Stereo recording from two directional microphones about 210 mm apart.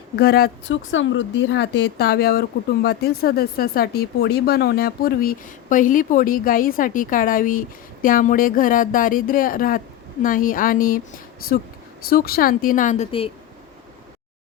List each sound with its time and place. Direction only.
0.2 s speech: 45° left (ahead or behind)
0.7 s speech: 65° left (ahead or behind); by 13.3 s 25° left (ahead or behind)